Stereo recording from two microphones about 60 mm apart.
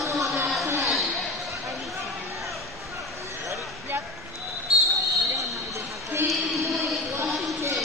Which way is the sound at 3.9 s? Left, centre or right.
Right.